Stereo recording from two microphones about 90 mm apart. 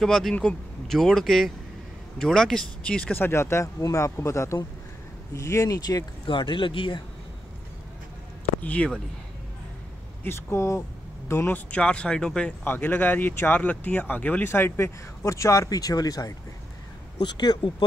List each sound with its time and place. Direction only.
0.0 s speech: 5° left (ahead or behind); by 6.0 s 45° left (ahead or behind)
6.2 s speech: 65° left (ahead or behind)
8.5 s speech: 15° left (ahead or behind)
10.2 s speech: 30° left (ahead or behind)
11.5 s speech: 10° left (ahead or behind)
12.6 s speech: 20° left (ahead or behind); by 17.8 s 55° left (ahead or behind)